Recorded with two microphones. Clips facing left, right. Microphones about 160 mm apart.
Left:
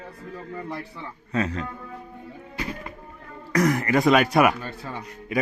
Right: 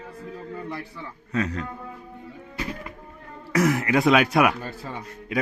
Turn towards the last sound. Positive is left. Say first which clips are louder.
# left 1 dB
turn(degrees=0)  # may be behind; listen again after turning